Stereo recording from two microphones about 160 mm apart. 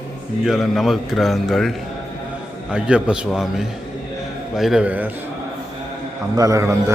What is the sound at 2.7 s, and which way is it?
A man's voice, 5° right (ahead or behind).